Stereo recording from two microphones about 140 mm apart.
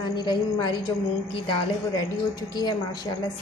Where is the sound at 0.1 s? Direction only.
30° left (ahead or behind).